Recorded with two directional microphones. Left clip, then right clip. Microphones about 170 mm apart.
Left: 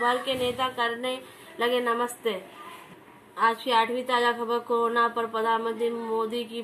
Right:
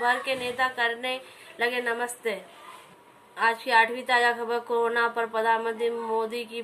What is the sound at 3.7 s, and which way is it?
A woman's voice, 25° right (ahead or behind).